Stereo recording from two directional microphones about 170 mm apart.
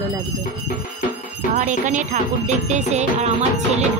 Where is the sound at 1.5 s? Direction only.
50° right (ahead or behind).